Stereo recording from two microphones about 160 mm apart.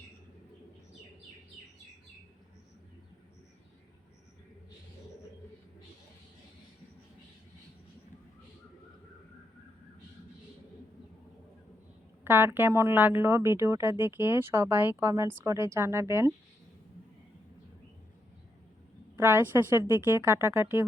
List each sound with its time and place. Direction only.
12.2 s speech: 15° right (ahead or behind)
19.1 s speech: 15° right (ahead or behind)